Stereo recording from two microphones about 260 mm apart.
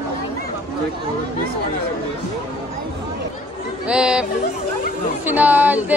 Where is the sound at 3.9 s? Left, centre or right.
Centre.